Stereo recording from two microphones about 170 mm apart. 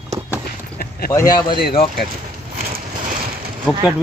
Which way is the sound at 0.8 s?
60° left (ahead or behind).